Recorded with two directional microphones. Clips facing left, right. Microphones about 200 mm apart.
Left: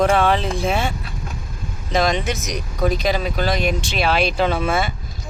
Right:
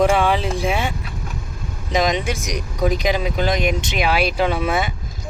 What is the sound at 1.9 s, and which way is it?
Speech, 15° right (ahead or behind).